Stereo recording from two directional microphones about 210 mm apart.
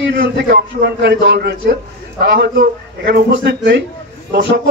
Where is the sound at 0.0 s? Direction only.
55° right (ahead or behind).